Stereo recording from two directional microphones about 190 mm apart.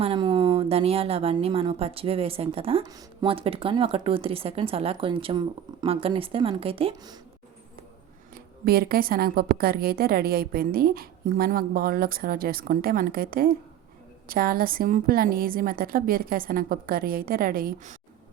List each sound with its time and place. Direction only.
0.0 s a woman's voice: 25° right (ahead or behind)
8.6 s a woman's voice: 55° right (ahead or behind)